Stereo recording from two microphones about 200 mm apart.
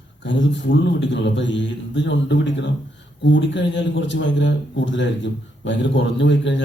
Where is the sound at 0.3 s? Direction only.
65° left (ahead or behind).